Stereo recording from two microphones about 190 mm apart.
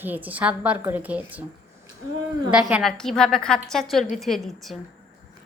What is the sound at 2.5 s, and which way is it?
A woman's voice, 5° right (ahead or behind).